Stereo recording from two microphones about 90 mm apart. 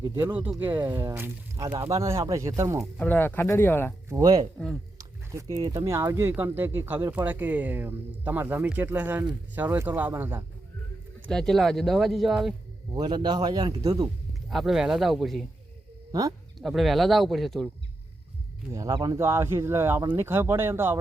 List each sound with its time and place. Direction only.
0.2 s speech: 20° right (ahead or behind)
3.0 s speech: 20° left (ahead or behind)
4.5 s speech: centre (ahead or behind)
4.9 s a sound: 35° right (ahead or behind)
5.5 s a man's voice: 50° right (ahead or behind)
5.8 s speech: 30° right (ahead or behind)
11.3 s speech: 5° left (ahead or behind)
12.9 s a man's voice: 50° right (ahead or behind)
14.5 s speech: 5° right (ahead or behind)
16.6 s speech: centre (ahead or behind)
18.7 s speech: 40° right (ahead or behind)